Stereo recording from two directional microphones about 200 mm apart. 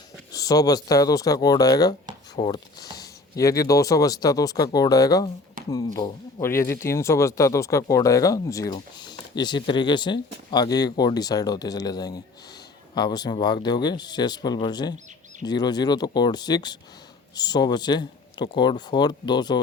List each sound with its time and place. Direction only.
0.3 s speech: 15° left (ahead or behind)